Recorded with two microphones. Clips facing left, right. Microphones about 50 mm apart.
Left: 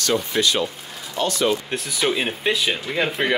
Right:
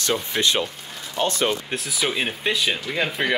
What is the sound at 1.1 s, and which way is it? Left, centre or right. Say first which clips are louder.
Speech: left 1 dB; right.